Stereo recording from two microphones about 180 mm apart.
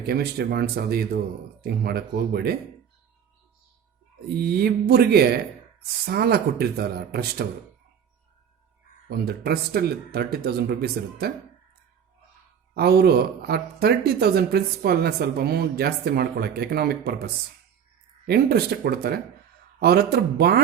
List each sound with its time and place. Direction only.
0.0 s speech: 60° right (ahead or behind)
4.4 s speech: 60° right (ahead or behind)
9.0 s speech: 60° right (ahead or behind)
12.7 s speech: 60° right (ahead or behind)
18.3 s speech: 60° right (ahead or behind)